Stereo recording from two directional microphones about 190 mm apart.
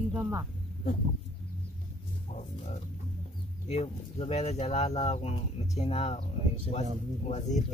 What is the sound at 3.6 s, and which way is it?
Speech, 35° left (ahead or behind).